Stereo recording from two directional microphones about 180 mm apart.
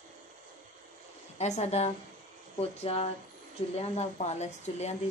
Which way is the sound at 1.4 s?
40° left (ahead or behind).